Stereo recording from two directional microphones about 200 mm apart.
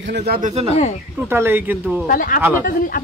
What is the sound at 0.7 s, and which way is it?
Speech, 35° left (ahead or behind).